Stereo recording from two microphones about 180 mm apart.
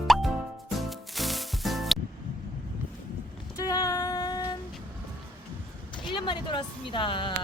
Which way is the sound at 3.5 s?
20° left (ahead or behind).